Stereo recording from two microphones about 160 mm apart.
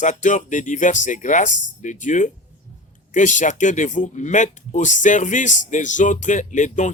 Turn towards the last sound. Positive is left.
turn(degrees=50)  # may be behind; listen again after turning